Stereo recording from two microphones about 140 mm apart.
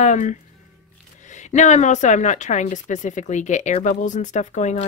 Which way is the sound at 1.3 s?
60° left (ahead or behind).